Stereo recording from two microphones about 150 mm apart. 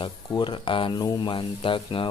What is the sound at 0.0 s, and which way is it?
Speech, 30° left (ahead or behind).